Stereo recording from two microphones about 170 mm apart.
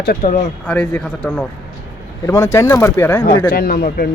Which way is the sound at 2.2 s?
15° left (ahead or behind).